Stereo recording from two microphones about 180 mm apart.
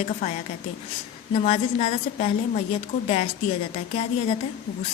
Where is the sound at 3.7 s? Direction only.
35° left (ahead or behind).